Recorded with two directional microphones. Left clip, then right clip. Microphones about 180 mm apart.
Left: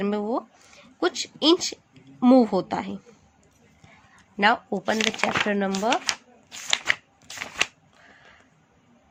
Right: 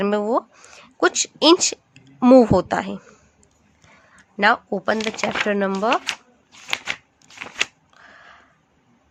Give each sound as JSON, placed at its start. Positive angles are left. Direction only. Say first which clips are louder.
{"t": 0.0, "sound": "speech", "louder": "right 7 dB", "side_deg": -35}
{"t": 4.1, "sound": "speech", "louder": "right 3 dB", "side_deg": -20}